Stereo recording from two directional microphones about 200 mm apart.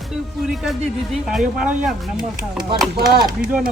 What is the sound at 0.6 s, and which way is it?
A man's voice, centre (ahead or behind).